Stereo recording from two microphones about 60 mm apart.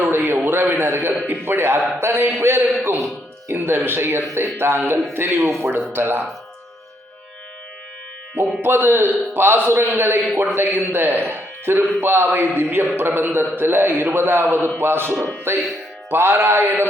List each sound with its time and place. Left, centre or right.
0.0 s a sound: right
0.4 s a man's voice: right
5.9 s a man's voice: right
8.4 s a man's voice: right
10.3 s a man's voice: right
10.6 s a man's voice: right